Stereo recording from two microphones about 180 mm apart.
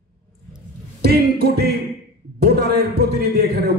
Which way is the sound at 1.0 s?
60° right (ahead or behind).